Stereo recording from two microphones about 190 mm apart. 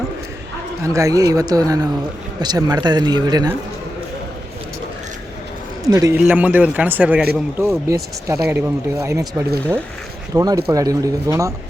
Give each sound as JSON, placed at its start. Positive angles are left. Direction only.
{"t": 0.8, "sound": "speech", "side_deg": -15}
{"t": 5.8, "sound": "speech", "side_deg": -15}
{"t": 6.1, "sound": "speech", "side_deg": -5}
{"t": 7.9, "sound": "speech", "side_deg": -15}